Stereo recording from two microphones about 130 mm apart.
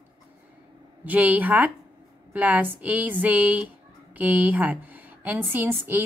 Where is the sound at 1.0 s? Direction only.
10° right (ahead or behind).